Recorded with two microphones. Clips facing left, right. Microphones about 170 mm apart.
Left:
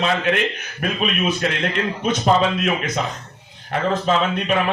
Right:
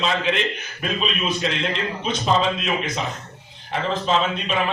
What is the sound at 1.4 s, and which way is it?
A man's voice, 55° left (ahead or behind).